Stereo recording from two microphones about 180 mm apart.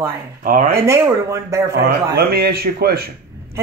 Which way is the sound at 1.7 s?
60° right (ahead or behind).